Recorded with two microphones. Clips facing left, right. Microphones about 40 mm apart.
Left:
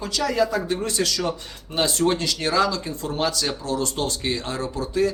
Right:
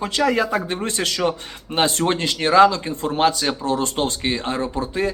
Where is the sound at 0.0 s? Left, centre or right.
Right.